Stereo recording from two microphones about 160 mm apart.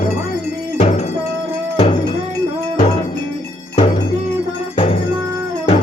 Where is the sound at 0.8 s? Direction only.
45° left (ahead or behind).